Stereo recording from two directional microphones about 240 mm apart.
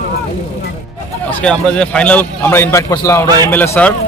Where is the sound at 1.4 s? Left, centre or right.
Centre.